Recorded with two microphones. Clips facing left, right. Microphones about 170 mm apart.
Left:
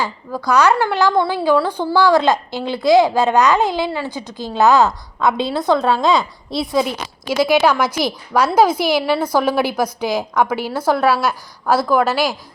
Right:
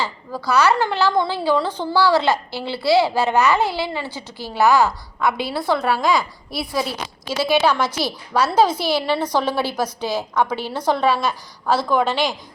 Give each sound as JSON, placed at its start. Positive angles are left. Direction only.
{"t": 0.0, "sound": "a woman's voice", "side_deg": 15}